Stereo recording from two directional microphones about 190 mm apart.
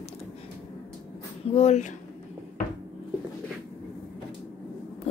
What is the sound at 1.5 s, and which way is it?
Speech, 35° left (ahead or behind).